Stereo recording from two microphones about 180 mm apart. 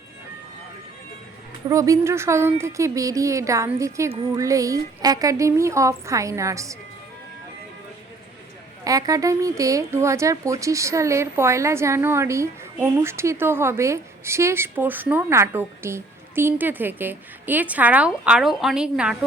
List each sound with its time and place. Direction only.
1.7 s speech: 20° right (ahead or behind)
8.8 s speech: 20° right (ahead or behind)